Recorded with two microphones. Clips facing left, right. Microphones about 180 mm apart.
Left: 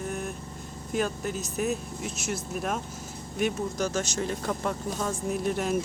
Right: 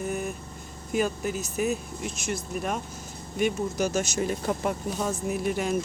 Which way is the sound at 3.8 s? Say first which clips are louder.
Right 2 dB; 10° right (ahead or behind).